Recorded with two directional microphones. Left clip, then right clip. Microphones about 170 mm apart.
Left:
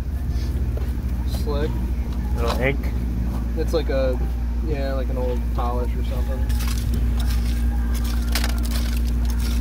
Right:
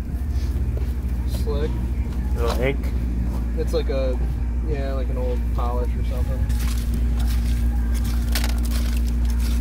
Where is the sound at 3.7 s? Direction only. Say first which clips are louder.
Left 3 dB; centre (ahead or behind).